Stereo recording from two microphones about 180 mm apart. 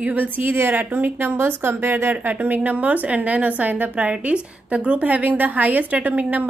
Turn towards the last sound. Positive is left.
turn(degrees=-10)  # may be behind; listen again after turning